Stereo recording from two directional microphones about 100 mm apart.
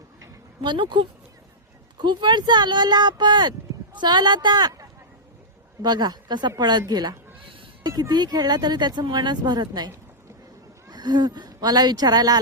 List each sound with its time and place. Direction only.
0.6 s speech: 50° right (ahead or behind)